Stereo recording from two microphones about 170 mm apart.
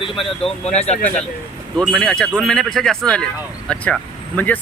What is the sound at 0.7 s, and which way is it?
Speech, 40° left (ahead or behind).